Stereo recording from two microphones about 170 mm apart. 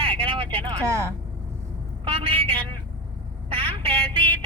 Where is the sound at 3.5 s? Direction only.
35° right (ahead or behind).